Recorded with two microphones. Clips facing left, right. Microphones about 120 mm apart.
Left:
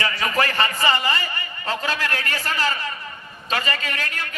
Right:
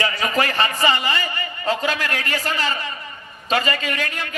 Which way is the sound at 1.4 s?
25° right (ahead or behind).